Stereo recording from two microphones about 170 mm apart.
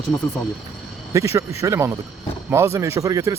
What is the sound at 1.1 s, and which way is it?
Speech, 15° right (ahead or behind).